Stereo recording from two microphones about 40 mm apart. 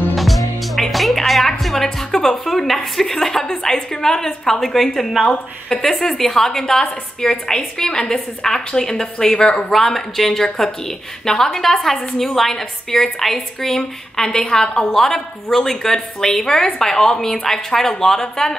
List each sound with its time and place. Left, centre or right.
0.1 s music: centre
2.4 s a woman's voice: centre
5.2 s a woman's voice: left